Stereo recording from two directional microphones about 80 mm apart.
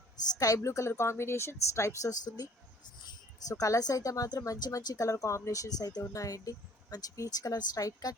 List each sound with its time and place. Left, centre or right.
0.3 s a woman's voice: left
2.2 s speech: left
3.5 s speech: left